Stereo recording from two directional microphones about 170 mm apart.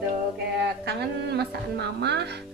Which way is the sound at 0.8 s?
75° right (ahead or behind).